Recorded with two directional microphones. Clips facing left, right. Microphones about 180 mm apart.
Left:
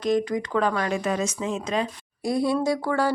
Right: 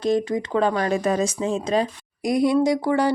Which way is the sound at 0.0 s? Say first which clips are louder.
Right 2 dB; 30° right (ahead or behind).